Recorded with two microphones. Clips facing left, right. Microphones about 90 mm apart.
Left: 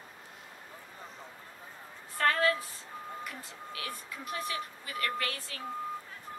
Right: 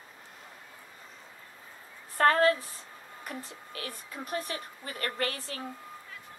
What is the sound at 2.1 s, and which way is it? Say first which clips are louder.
A woman's voice: right 5 dB; 35° right (ahead or behind).